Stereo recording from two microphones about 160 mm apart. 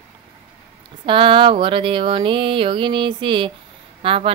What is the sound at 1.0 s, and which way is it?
Speech, 35° right (ahead or behind).